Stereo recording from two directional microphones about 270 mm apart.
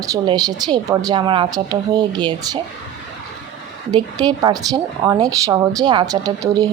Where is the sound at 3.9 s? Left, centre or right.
Centre.